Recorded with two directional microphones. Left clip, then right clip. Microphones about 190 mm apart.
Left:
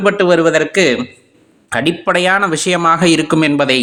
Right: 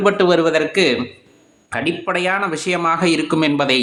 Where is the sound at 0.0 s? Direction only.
10° left (ahead or behind).